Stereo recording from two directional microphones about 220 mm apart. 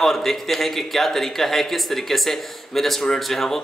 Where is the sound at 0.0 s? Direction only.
Centre (ahead or behind).